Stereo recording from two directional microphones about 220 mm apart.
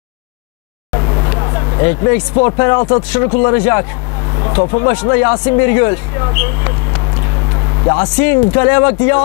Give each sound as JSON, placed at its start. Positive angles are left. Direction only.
{"t": 0.9, "sound": "vehicle", "side_deg": 25}
{"t": 2.3, "sound": "speech", "side_deg": 25}
{"t": 7.5, "sound": "vehicle", "side_deg": 25}
{"t": 8.2, "sound": "speech", "side_deg": 15}